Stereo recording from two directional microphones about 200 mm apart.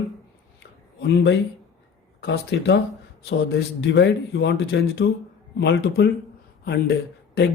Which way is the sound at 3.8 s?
55° left (ahead or behind).